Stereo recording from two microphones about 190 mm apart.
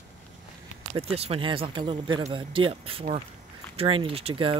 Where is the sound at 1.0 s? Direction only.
30° right (ahead or behind).